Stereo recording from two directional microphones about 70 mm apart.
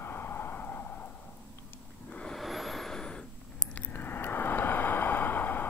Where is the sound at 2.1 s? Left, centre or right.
Centre.